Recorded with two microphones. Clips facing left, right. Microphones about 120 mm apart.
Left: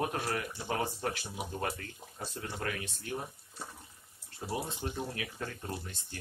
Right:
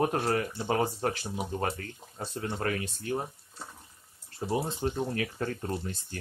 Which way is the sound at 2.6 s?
45° right (ahead or behind).